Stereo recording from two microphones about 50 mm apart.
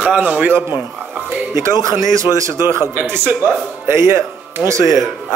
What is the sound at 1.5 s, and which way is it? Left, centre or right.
Speech, right.